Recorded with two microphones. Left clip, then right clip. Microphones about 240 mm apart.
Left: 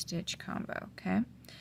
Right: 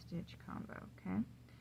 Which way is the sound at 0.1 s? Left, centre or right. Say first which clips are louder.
Left 12 dB; left.